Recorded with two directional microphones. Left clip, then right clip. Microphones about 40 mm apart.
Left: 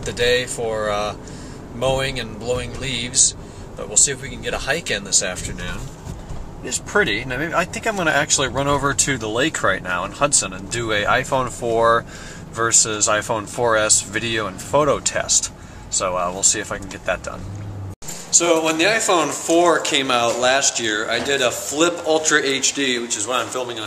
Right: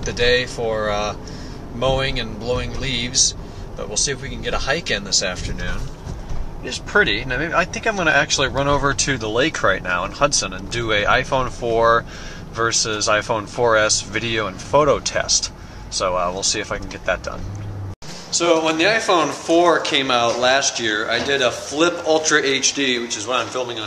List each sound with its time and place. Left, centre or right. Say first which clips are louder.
0.0 s speech: right 1 dB; centre
6.6 s speech: right 2 dB; centre
8.6 s speech: right 1 dB; centre
11.6 s speech: right 1 dB; centre
12.9 s speech: right 1 dB; centre
18.3 s speech: even; centre